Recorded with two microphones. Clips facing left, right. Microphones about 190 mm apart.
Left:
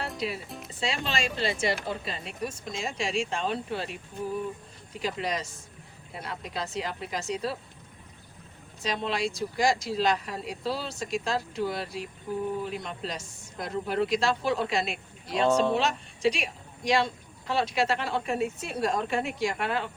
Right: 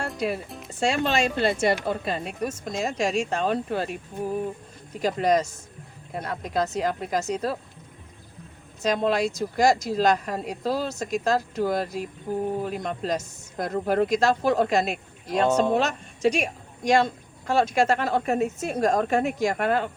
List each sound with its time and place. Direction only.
0.2 s speech: 50° right (ahead or behind)
8.8 s speech: 45° right (ahead or behind)